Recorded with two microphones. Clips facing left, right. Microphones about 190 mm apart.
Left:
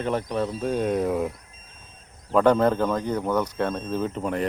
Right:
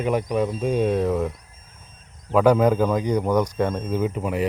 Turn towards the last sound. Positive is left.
turn(degrees=-5)  # may be behind; listen again after turning